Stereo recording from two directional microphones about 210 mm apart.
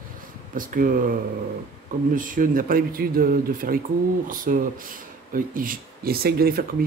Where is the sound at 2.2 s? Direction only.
40° right (ahead or behind).